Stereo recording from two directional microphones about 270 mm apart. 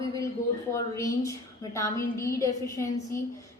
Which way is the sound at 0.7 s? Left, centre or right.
Centre.